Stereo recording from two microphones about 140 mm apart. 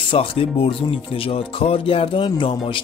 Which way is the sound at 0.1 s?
40° left (ahead or behind).